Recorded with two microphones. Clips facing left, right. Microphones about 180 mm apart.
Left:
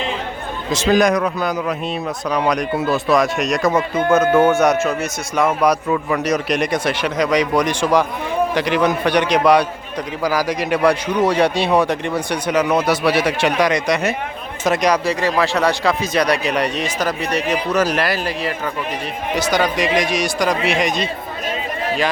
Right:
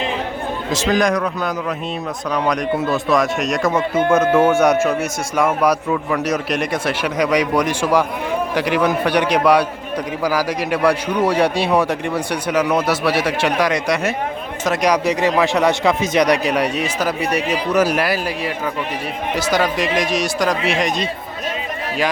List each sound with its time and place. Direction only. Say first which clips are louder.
0.7 s speech: left 3 dB; 5° left (ahead or behind)
2.3 s a man's voice: even; 15° left (ahead or behind); by 5.7 s 10° right (ahead or behind)
5.9 s a man's voice: left 1 dB; 5° left (ahead or behind)